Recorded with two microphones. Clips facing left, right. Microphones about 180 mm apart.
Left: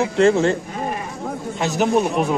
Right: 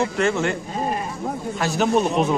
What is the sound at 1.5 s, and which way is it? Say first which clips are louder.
Speech: left 2 dB; 20° left (ahead or behind).